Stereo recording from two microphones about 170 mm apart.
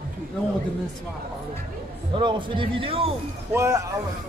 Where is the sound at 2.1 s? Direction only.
30° right (ahead or behind).